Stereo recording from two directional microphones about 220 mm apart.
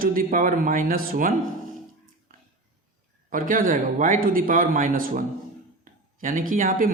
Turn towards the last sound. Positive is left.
turn(degrees=-40)  # may be behind; listen again after turning